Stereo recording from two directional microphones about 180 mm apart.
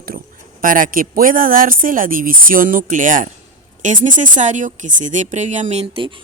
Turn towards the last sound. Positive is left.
turn(degrees=-30)  # may be behind; listen again after turning